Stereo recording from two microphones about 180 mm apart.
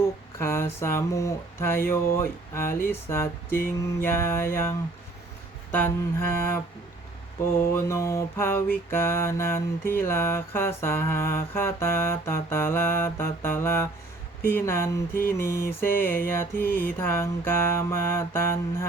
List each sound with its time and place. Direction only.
0.3 s mantra: 15° left (ahead or behind)
5.7 s mantra: 10° left (ahead or behind)
16.0 s music: 55° left (ahead or behind)
16.3 s mantra: 15° left (ahead or behind)